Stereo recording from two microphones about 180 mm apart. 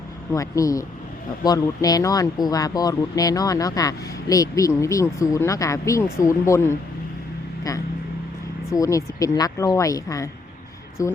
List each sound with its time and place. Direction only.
0.3 s speech: 20° left (ahead or behind)
8.7 s speech: 20° left (ahead or behind)